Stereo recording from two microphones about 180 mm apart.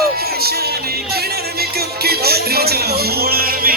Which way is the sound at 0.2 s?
60° right (ahead or behind).